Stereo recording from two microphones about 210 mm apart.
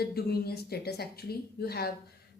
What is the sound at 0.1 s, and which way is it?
A woman's voice, 45° left (ahead or behind).